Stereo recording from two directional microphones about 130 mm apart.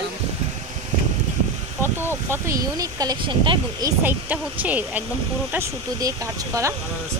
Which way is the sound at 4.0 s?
15° right (ahead or behind).